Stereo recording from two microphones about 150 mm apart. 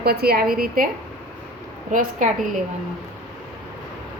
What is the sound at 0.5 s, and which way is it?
Speech, 75° right (ahead or behind).